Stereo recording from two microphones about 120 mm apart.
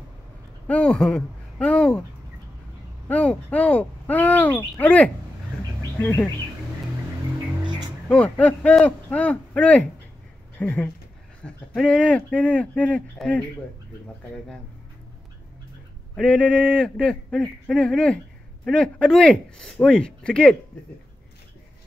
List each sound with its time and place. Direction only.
0.7 s speech: 10° left (ahead or behind)
3.1 s speech: 10° left (ahead or behind)
8.1 s speech: 10° left (ahead or behind)
16.2 s speech: 10° left (ahead or behind)